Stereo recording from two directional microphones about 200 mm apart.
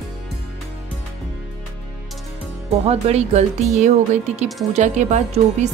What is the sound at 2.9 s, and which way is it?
A woman's voice, 30° right (ahead or behind).